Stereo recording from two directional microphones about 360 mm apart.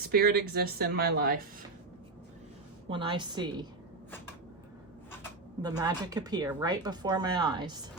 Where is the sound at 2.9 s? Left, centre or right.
Centre.